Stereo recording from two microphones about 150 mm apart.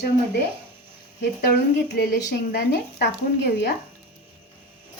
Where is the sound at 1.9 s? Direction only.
90° left.